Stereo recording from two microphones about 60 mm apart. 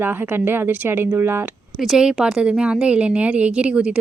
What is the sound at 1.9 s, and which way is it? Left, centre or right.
A woman's voice, centre.